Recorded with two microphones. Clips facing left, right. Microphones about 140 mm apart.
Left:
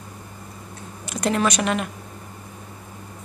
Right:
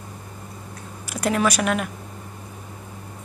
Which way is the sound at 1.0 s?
5° right (ahead or behind).